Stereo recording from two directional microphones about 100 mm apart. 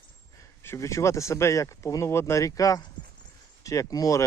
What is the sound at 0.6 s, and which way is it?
Speech, 25° left (ahead or behind).